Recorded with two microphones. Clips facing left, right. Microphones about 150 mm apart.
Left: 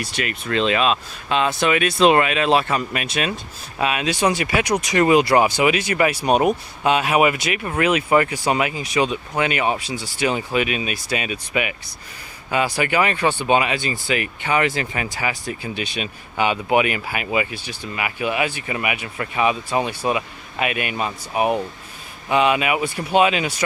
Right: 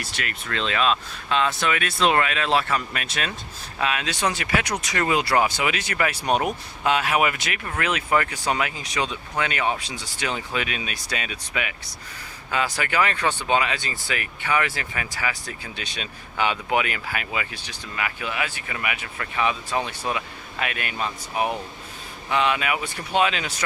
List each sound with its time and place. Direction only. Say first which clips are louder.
0.0 s speech: left 6 dB; 20° left (ahead or behind)